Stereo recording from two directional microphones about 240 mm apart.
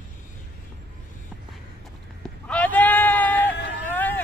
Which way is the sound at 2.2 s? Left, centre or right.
Centre.